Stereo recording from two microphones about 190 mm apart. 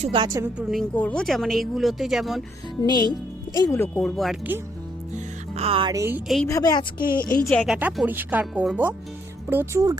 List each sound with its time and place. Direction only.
0.0 s a woman's voice: 25° right (ahead or behind)
0.4 s speech: 5° right (ahead or behind)
2.8 s a woman's voice: 20° left (ahead or behind); by 4.4 s centre (ahead or behind)
5.1 s music: 30° right (ahead or behind)
5.9 s speech: 15° right (ahead or behind)
6.2 s speech: centre (ahead or behind)
6.5 s a woman's voice: 20° left (ahead or behind)
7.0 s a woman's voice: 50° left (ahead or behind)
7.4 s speech: centre (ahead or behind)
7.8 s speech: 10° right (ahead or behind)